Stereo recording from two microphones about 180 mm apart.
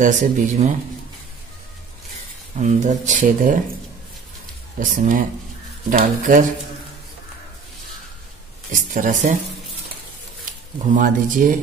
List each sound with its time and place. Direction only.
0.0 s speech: 45° right (ahead or behind)
2.5 s speech: 40° right (ahead or behind)
4.7 s speech: 45° right (ahead or behind)
8.9 s speech: 45° right (ahead or behind)
10.9 s speech: 50° right (ahead or behind)